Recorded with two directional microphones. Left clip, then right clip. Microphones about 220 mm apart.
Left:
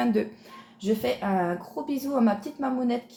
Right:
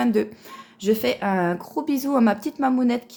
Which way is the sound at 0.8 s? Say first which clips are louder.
Right 5 dB; 45° right (ahead or behind).